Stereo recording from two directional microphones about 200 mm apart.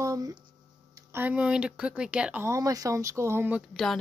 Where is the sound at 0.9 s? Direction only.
10° right (ahead or behind).